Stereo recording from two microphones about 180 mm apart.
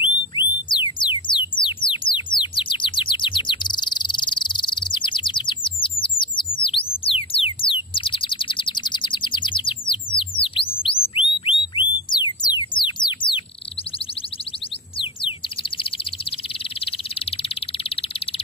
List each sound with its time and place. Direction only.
0.0 s music: 25° left (ahead or behind)